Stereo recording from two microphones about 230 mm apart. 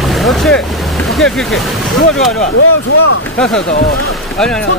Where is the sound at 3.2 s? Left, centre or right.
Centre.